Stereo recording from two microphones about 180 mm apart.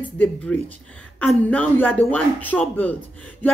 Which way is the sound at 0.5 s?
5° left (ahead or behind).